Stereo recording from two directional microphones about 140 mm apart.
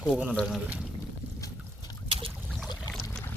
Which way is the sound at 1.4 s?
30° left (ahead or behind).